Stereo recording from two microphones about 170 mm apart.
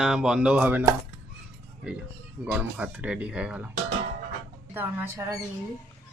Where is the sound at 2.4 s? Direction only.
10° right (ahead or behind).